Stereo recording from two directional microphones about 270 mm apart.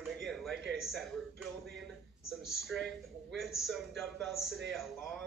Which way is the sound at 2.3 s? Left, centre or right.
Centre.